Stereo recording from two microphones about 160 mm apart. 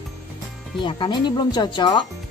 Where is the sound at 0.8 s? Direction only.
30° left (ahead or behind).